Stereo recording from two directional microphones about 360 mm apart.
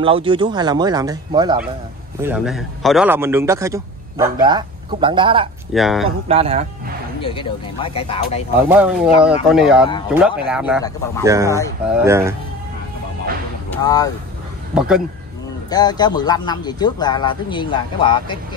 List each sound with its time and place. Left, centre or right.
0.0 s a man's voice: centre
5.7 s speech: centre
6.0 s a man's voice: centre
7.2 s speech: centre
8.6 s a man's voice: centre
13.7 s speech: centre
14.7 s speech: centre
15.7 s speech: centre